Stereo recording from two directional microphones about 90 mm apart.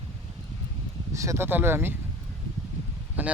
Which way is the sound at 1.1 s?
35° right (ahead or behind).